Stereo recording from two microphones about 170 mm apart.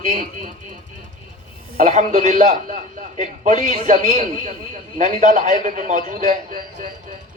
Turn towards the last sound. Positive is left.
turn(degrees=-50)  # may be behind; listen again after turning